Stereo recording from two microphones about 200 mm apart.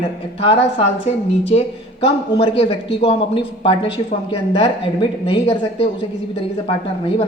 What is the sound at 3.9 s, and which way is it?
Speech, 25° left (ahead or behind).